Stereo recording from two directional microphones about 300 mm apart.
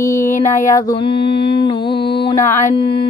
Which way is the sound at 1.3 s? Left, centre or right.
Left.